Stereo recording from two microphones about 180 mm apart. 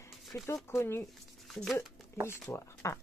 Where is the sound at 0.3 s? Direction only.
15° left (ahead or behind).